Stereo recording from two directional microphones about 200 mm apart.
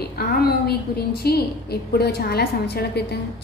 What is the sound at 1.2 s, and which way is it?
A woman's voice, 50° left (ahead or behind).